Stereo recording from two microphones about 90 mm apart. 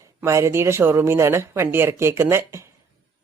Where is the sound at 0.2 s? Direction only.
30° right (ahead or behind).